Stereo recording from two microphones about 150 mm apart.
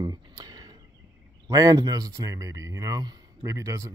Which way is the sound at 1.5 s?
25° right (ahead or behind).